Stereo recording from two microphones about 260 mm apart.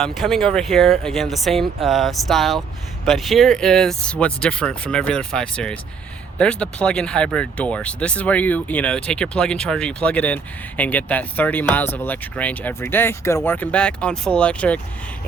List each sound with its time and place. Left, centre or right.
0.0 s speech: centre